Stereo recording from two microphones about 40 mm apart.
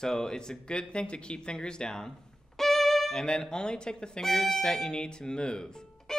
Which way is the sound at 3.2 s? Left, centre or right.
Centre.